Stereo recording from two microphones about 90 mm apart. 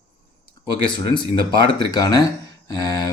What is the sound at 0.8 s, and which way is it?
Speech, 60° left (ahead or behind).